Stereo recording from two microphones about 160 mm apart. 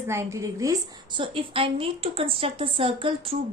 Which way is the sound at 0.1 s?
15° right (ahead or behind).